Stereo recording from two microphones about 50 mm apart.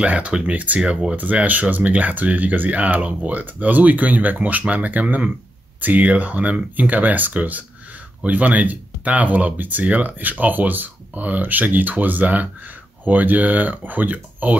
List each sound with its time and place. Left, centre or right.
0.0 s speech: right
0.7 s speech: centre
1.1 s speech: right